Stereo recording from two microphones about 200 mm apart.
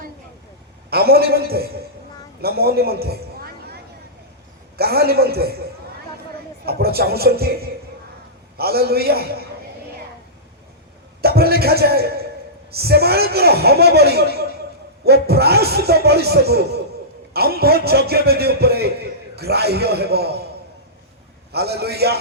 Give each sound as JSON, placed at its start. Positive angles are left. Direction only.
{"t": 0.9, "sound": "a man's voice", "side_deg": -50}
{"t": 4.8, "sound": "a man's voice", "side_deg": -50}
{"t": 6.7, "sound": "a man's voice", "side_deg": -50}
{"t": 11.2, "sound": "a man's voice", "side_deg": -50}
{"t": 21.5, "sound": "a man's voice", "side_deg": -55}